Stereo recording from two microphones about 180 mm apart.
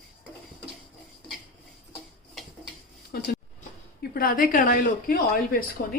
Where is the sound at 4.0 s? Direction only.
55° left (ahead or behind).